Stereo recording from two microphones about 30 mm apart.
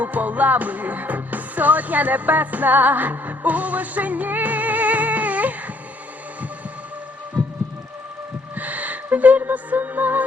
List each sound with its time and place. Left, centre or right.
0.0 s music: right
8.5 s music: right